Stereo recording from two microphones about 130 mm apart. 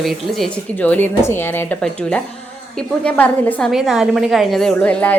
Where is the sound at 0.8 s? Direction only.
15° left (ahead or behind).